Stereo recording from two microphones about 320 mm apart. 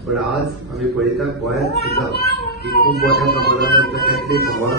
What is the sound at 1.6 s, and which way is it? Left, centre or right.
Speech, left.